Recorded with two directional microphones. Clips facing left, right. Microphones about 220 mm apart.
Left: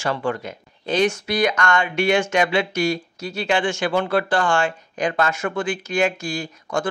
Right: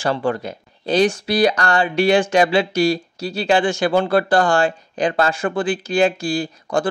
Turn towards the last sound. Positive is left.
turn(degrees=-35)  # may be behind; listen again after turning